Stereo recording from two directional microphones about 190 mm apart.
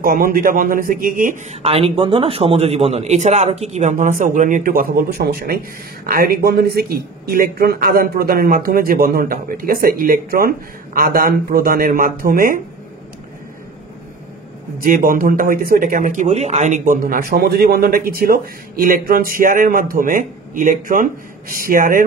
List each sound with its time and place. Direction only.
0.0 s speech: 50° right (ahead or behind)
1.5 s a man's voice: 30° right (ahead or behind); by 12.5 s 50° right (ahead or behind)
14.8 s speech: 45° right (ahead or behind)